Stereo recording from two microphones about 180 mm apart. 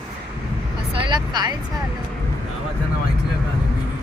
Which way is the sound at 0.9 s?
25° right (ahead or behind).